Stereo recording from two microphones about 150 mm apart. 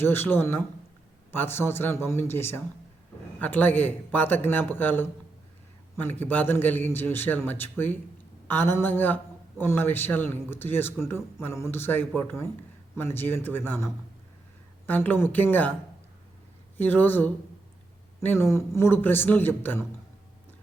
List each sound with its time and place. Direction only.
0.0 s speech: 15° left (ahead or behind)
16.7 s speech: 10° left (ahead or behind)